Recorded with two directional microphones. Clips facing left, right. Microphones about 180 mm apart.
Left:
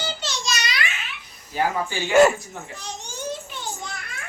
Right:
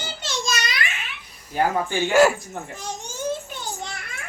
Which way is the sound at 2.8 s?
50° right (ahead or behind).